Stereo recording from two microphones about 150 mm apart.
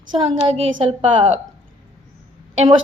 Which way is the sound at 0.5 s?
35° right (ahead or behind).